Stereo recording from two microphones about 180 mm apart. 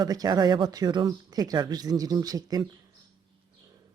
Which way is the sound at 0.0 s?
20° right (ahead or behind).